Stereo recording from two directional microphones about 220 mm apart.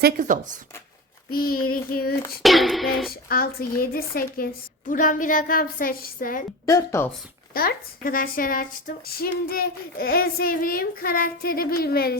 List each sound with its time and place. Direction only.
0.0 s speech: 40° right (ahead or behind)
1.3 s a child's voice: 40° left (ahead or behind)
2.4 s speech: centre (ahead or behind)
3.1 s a child's voice: 40° left (ahead or behind)
6.7 s a woman's voice: 15° left (ahead or behind)
7.5 s a woman's voice: 40° left (ahead or behind)